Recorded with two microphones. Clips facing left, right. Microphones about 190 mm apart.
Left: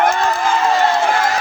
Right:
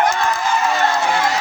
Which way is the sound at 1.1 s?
50° left (ahead or behind).